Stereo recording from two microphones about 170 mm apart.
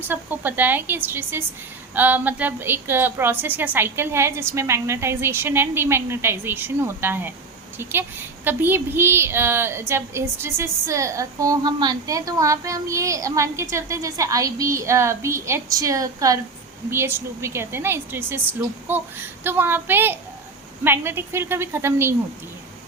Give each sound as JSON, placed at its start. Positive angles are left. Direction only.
{"t": 0.1, "sound": "a woman's voice", "side_deg": -10}